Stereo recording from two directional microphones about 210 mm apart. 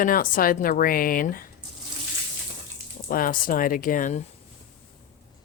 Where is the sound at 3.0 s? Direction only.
40° left (ahead or behind).